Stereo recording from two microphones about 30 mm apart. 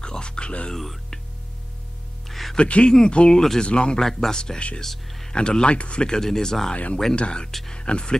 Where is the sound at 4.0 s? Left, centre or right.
Centre.